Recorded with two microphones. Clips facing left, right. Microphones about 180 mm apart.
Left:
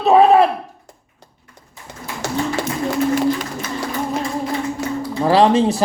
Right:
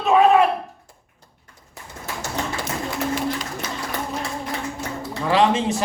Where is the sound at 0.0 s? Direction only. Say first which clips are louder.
Left 4 dB; 35° left (ahead or behind).